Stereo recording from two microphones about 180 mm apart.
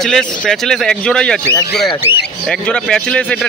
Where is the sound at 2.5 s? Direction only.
5° left (ahead or behind).